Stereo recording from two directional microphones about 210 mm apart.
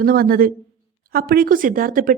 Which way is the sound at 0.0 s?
45° right (ahead or behind).